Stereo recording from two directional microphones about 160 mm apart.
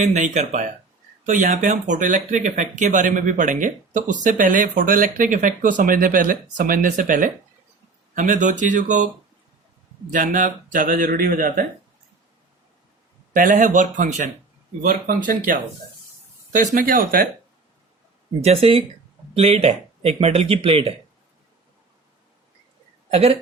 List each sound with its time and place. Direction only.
0.0 s speech: 45° right (ahead or behind)
10.1 s speech: 55° right (ahead or behind)
13.3 s speech: 55° right (ahead or behind)
18.4 s speech: 40° right (ahead or behind)
23.1 s speech: 40° right (ahead or behind)